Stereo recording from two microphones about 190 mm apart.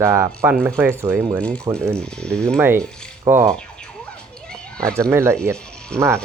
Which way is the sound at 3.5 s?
5° left (ahead or behind).